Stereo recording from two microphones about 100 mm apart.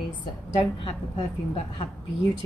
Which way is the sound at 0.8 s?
60° left (ahead or behind).